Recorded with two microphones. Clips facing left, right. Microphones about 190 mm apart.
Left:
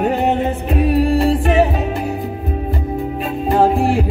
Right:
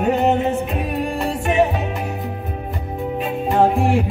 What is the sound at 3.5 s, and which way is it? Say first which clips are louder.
Music: left 2 dB; 35° left (ahead or behind).